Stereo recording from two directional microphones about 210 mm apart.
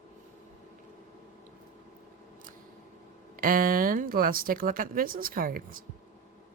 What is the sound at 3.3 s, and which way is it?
Speech, 40° right (ahead or behind).